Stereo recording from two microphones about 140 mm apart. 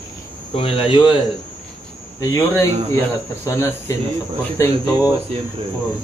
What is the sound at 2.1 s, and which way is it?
A man's voice, 25° left (ahead or behind).